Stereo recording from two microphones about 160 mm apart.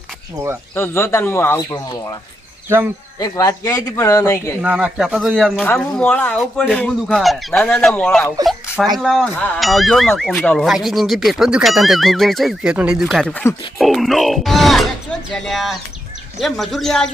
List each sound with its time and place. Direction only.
0.8 s speech: 15° left (ahead or behind)
3.2 s a man's voice: 25° left (ahead or behind)
4.6 s speech: 10° right (ahead or behind); by 10.7 s 10° left (ahead or behind)
10.7 s speech: centre (ahead or behind)